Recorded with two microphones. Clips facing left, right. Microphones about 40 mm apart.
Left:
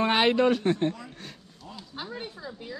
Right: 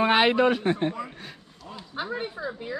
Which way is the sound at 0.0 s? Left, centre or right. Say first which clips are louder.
Right 2 dB; centre.